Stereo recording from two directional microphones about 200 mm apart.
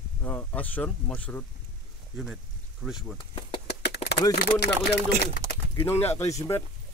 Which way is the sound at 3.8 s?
60° left (ahead or behind).